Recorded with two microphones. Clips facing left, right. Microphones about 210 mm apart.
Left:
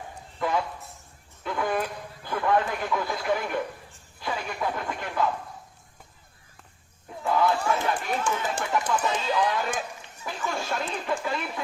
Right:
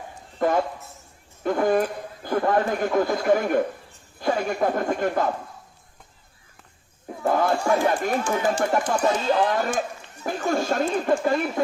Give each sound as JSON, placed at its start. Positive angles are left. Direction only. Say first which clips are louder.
{"t": 0.3, "sound": "a sound", "louder": "right 6 dB", "side_deg": -45}
{"t": 1.5, "sound": "a man's voice", "louder": "right 7 dB", "side_deg": -45}
{"t": 7.2, "sound": "a man's voice", "louder": "right 2 dB", "side_deg": -50}